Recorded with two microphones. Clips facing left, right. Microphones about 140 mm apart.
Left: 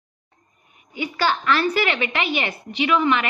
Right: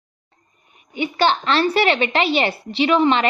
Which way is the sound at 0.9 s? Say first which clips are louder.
Right 4 dB; 25° right (ahead or behind).